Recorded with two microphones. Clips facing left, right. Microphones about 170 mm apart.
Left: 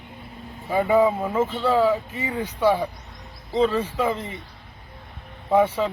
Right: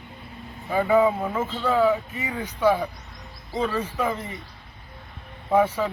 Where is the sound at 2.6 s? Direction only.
10° left (ahead or behind).